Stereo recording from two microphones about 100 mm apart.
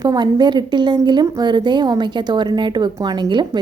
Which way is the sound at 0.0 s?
45° right (ahead or behind).